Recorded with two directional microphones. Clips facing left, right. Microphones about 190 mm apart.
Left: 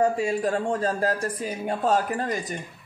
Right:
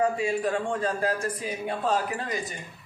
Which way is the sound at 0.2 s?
40° left (ahead or behind).